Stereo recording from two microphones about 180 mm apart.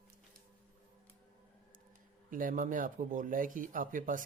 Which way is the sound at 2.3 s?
50° right (ahead or behind).